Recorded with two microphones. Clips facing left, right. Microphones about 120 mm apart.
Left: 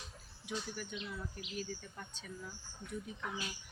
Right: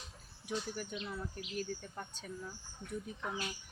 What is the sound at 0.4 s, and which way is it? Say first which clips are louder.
Speech: right 3 dB; 45° right (ahead or behind).